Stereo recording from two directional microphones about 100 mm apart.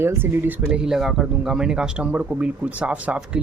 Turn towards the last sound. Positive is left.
turn(degrees=-15)  # may be behind; listen again after turning